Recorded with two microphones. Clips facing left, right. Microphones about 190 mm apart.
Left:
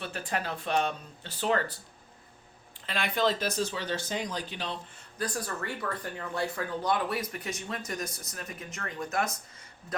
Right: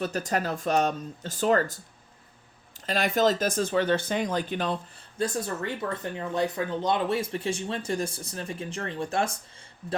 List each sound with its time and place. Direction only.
0.0 s speech: 40° right (ahead or behind)
2.8 s speech: 40° right (ahead or behind)
5.1 s speech: 25° right (ahead or behind)